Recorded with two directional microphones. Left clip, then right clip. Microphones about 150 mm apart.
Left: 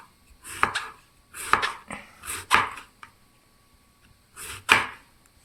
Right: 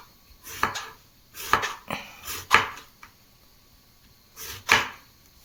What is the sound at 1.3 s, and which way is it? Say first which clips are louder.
Dog: left 1 dB; centre (ahead or behind).